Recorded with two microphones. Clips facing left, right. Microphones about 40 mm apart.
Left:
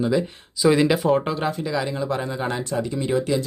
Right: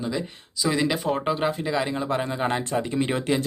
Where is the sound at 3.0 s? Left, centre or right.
Right.